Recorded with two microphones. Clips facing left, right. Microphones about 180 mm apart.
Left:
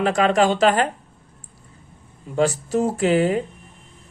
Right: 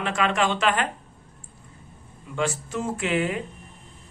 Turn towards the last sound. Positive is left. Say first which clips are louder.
# left 7 dB
turn(degrees=35)  # may be behind; listen again after turning